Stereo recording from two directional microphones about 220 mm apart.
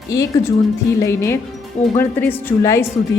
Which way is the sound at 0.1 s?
15° left (ahead or behind).